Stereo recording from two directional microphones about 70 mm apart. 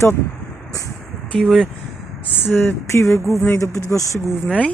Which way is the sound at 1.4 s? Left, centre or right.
Centre.